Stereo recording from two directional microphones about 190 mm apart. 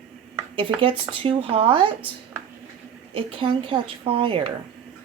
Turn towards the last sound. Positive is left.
turn(degrees=-25)  # may be behind; listen again after turning